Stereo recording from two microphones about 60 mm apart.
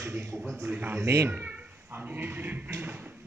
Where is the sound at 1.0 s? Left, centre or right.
Right.